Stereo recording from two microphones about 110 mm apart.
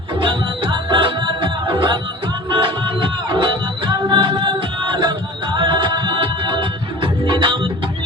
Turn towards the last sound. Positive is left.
turn(degrees=-45)  # may be behind; listen again after turning